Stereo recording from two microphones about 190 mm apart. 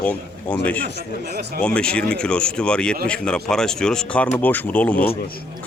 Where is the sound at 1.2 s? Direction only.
60° right (ahead or behind).